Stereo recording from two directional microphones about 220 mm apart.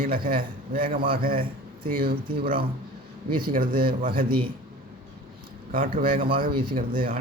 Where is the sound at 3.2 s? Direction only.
40° right (ahead or behind).